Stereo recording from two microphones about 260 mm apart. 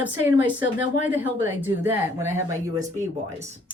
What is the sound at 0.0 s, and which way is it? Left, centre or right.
A woman's voice, centre.